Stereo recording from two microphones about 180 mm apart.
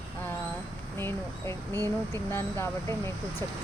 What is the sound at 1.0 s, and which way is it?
Speech, 15° left (ahead or behind).